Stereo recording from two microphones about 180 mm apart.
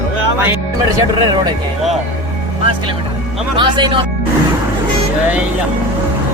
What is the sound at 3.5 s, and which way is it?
Speech, 25° right (ahead or behind).